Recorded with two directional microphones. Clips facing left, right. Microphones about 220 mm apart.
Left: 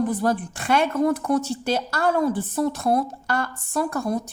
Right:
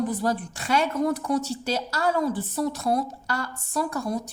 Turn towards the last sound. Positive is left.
turn(degrees=50)  # may be behind; listen again after turning